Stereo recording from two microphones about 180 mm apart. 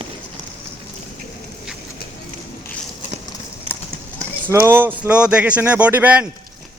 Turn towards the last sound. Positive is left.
turn(degrees=-10)  # may be behind; listen again after turning